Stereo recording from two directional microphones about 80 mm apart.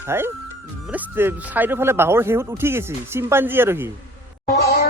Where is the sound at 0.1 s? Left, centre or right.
Right.